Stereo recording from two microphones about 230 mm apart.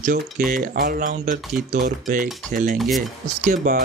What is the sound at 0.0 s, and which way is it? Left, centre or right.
Speech, right.